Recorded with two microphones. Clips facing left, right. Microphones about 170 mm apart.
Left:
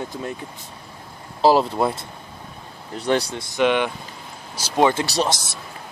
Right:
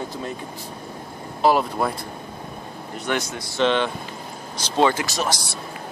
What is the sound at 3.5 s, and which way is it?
Speech, 15° left (ahead or behind).